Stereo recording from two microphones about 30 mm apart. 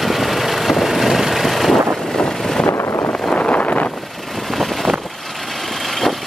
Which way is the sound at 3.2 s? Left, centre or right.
Left.